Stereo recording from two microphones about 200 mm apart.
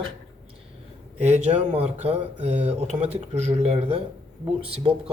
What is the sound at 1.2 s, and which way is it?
Speech, 35° right (ahead or behind).